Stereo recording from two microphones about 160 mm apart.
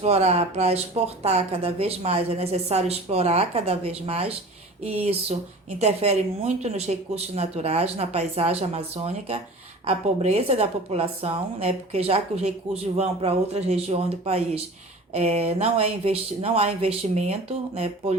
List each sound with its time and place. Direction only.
0.0 s a woman's voice: 40° right (ahead or behind)